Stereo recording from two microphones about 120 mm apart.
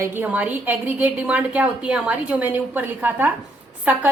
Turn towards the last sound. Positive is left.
turn(degrees=-15)  # may be behind; listen again after turning